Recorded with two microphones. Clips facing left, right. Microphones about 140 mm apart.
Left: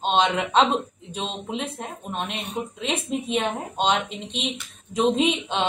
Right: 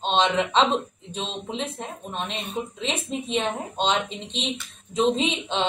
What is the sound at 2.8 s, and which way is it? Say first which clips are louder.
Speech: left 4 dB; 50° left (ahead or behind).